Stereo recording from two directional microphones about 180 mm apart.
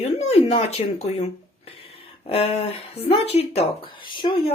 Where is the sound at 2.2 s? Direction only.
30° left (ahead or behind).